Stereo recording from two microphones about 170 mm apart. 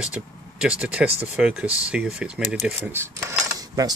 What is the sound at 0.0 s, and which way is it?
Speech, 5° right (ahead or behind).